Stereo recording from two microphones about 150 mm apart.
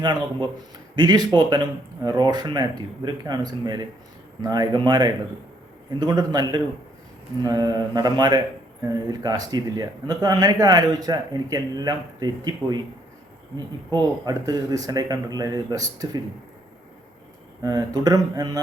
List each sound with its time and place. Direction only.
0.0 s speech: 30° right (ahead or behind)
13.9 s speech: 25° right (ahead or behind)
17.6 s speech: 25° right (ahead or behind)